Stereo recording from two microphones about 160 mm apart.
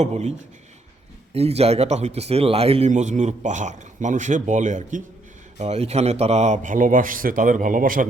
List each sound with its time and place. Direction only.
0.0 s a man's voice: 45° right (ahead or behind)
2.9 s a man's voice: 50° right (ahead or behind)